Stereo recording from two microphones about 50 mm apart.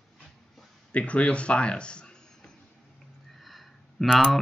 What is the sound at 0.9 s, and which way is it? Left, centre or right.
Speech, left.